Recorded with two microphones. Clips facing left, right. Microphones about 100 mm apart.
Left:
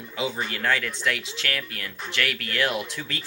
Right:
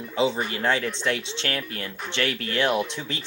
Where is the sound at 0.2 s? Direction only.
25° right (ahead or behind).